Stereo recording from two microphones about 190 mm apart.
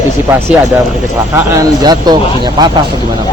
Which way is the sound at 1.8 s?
20° right (ahead or behind).